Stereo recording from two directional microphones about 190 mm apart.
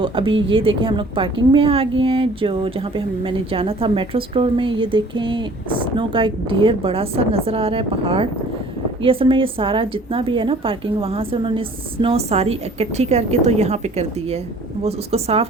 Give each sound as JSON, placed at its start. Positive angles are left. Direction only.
{"t": 0.0, "sound": "a woman's voice", "side_deg": -25}